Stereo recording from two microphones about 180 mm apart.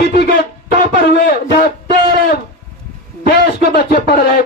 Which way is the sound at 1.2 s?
55° left (ahead or behind).